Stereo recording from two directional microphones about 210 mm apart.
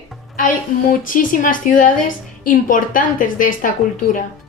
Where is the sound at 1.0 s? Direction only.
40° left (ahead or behind).